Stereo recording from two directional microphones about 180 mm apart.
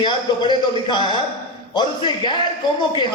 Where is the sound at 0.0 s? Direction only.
25° left (ahead or behind).